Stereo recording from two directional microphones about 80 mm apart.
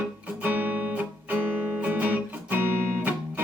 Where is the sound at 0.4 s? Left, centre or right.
Right.